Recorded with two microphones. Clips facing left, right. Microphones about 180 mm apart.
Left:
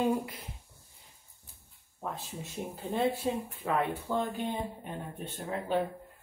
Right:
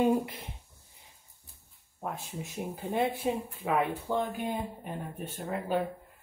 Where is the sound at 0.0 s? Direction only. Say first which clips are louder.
Right 3 dB; 25° right (ahead or behind).